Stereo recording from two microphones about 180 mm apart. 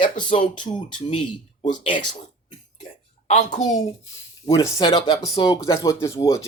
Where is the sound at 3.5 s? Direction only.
40° left (ahead or behind).